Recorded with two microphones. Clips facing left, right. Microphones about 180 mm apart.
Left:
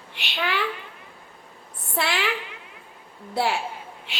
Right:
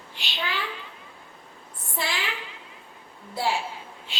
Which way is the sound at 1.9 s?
65° left (ahead or behind).